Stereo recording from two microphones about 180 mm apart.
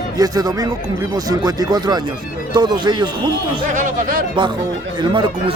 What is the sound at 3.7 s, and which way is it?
Speech, 45° right (ahead or behind).